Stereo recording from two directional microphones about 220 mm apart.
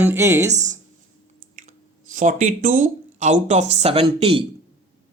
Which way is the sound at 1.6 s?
35° right (ahead or behind).